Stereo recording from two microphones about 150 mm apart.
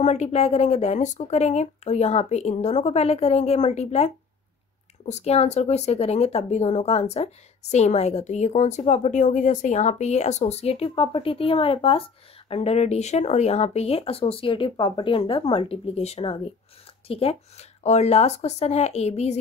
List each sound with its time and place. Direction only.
0.0 s speech: 50° left (ahead or behind)